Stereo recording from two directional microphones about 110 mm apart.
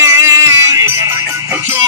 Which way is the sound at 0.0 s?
25° right (ahead or behind).